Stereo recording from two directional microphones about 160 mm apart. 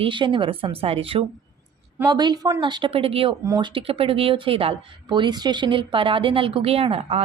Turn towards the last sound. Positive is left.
turn(degrees=-35)  # may be behind; listen again after turning